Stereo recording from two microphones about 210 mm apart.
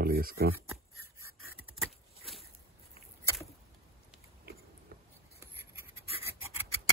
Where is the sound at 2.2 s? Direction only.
Centre (ahead or behind).